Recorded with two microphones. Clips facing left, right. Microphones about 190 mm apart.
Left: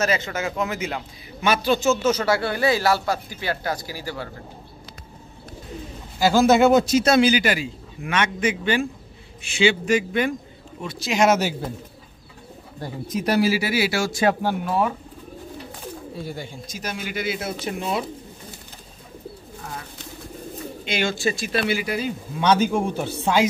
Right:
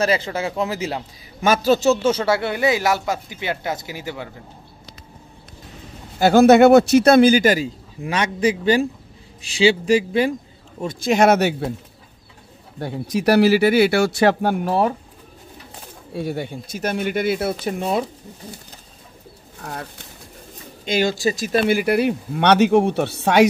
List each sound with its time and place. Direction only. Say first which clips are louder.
0.0 s a man's voice: right 3 dB; 30° right (ahead or behind)
6.1 s speech: right 5 dB; 60° right (ahead or behind); by 10.3 s 35° right (ahead or behind)
10.8 s speech: right 4 dB; 50° right (ahead or behind)
12.8 s speech: right 6 dB; 75° right (ahead or behind); by 14.7 s 55° right (ahead or behind)
14.7 s speech: right 3 dB; 35° right (ahead or behind)
16.2 s speech: right 11 dB; 65° right (ahead or behind)
17.6 s speech: right 2 dB; 45° right (ahead or behind)
20.8 s speech: right 4 dB; 40° right (ahead or behind); by 23.4 s 70° right (ahead or behind)